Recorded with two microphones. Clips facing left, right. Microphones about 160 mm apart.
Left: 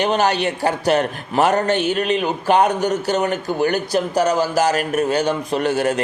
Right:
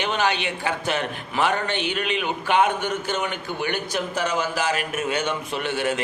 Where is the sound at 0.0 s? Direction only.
40° left (ahead or behind).